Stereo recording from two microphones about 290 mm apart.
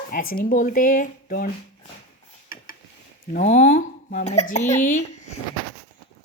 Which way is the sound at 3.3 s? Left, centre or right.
Left.